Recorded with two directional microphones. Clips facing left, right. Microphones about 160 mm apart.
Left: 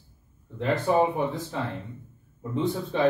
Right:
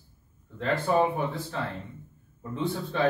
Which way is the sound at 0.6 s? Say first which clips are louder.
Left 2 dB; 15° left (ahead or behind).